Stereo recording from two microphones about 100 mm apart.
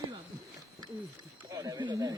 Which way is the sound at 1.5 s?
35° right (ahead or behind).